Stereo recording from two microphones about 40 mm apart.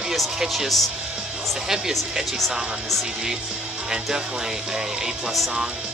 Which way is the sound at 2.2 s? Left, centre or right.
Centre.